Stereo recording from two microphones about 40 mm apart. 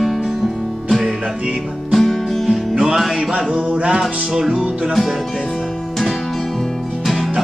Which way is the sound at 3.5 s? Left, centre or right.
Right.